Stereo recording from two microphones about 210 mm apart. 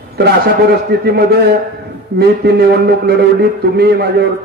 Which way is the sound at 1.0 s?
50° right (ahead or behind).